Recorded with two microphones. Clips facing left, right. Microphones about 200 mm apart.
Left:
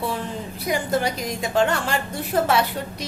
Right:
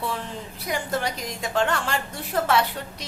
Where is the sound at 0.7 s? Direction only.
5° left (ahead or behind).